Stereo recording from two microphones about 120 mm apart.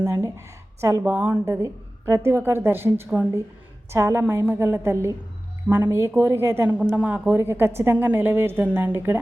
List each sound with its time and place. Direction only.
0.0 s speech: 25° right (ahead or behind)